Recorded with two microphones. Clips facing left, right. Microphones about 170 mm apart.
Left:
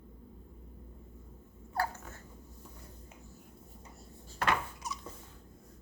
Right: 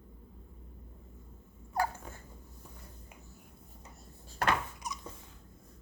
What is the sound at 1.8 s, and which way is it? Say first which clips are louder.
Dog: right 2 dB; 10° right (ahead or behind).